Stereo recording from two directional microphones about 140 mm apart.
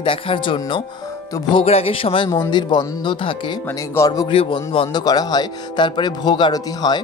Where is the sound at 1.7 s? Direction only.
45° left (ahead or behind).